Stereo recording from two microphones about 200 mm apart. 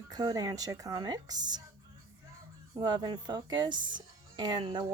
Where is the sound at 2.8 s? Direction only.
20° right (ahead or behind).